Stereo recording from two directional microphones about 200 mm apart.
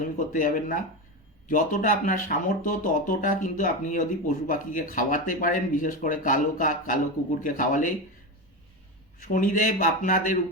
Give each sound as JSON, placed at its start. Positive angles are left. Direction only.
{"t": 0.0, "sound": "speech", "side_deg": 40}
{"t": 9.2, "sound": "speech", "side_deg": 40}